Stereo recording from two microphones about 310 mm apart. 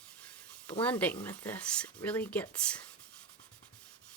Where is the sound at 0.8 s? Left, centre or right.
Centre.